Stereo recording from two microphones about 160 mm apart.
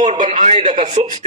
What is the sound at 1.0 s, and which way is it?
Speech, 40° right (ahead or behind).